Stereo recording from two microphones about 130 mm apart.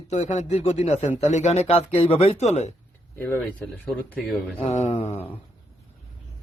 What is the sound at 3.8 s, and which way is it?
Speech, 5° left (ahead or behind).